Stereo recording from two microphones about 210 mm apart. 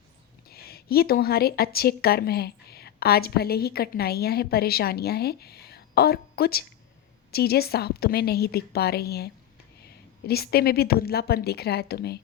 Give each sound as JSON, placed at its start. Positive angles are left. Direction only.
{"t": 0.5, "sound": "a woman's voice", "side_deg": 50}